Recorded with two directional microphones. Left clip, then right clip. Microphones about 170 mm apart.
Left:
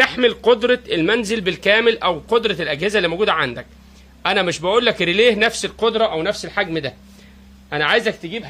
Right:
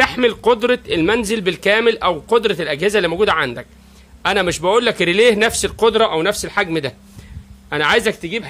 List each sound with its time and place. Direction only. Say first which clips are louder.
0.0 s speech: right 1 dB; 20° right (ahead or behind); by 8.5 s 40° right (ahead or behind)